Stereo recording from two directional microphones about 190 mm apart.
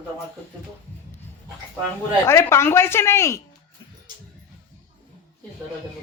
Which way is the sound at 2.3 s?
15° left (ahead or behind).